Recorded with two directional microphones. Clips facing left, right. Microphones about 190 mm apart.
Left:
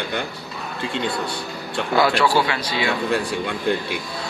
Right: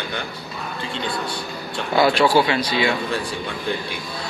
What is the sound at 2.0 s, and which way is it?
Speech, 20° right (ahead or behind).